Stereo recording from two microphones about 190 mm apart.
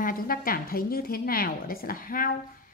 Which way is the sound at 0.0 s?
50° left (ahead or behind).